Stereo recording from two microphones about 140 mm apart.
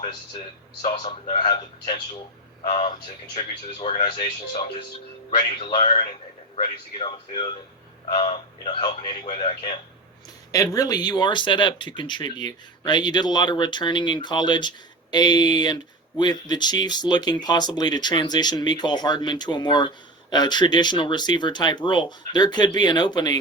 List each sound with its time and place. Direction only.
0.9 s speech: 45° left (ahead or behind)
5.7 s speech: 45° left (ahead or behind)
10.5 s speech: 25° left (ahead or behind)